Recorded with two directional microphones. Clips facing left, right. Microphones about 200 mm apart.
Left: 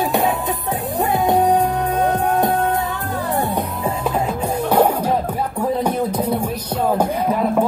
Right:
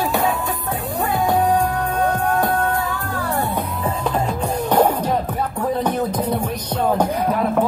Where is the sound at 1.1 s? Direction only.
20° left (ahead or behind).